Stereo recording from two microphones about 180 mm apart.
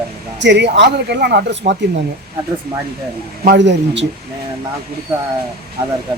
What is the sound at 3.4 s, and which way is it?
Speech, 70° right (ahead or behind).